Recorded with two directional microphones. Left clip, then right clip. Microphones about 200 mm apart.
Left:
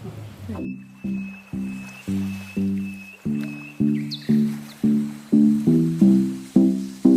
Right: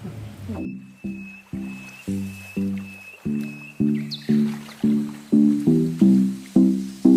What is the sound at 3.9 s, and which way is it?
Music, centre (ahead or behind).